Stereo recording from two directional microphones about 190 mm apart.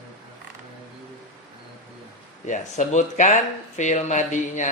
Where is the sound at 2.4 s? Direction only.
40° left (ahead or behind).